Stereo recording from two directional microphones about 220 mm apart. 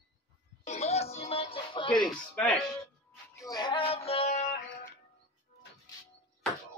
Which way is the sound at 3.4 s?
20° left (ahead or behind).